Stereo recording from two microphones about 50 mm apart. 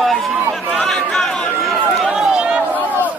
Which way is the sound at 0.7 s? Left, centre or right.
Centre.